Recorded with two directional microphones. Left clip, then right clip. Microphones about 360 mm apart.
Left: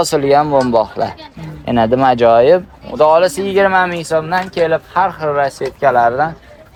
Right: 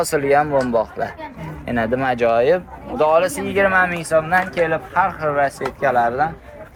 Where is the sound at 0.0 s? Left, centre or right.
Centre.